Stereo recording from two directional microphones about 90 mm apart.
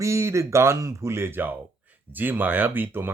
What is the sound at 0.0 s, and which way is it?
A man's voice, 30° right (ahead or behind).